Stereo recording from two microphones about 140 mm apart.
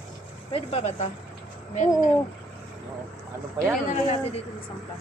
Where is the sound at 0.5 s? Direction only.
50° left (ahead or behind).